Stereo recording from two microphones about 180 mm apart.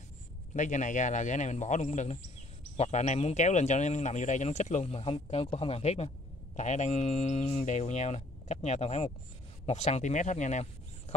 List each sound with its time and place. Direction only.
0.6 s a man's voice: 45° left (ahead or behind)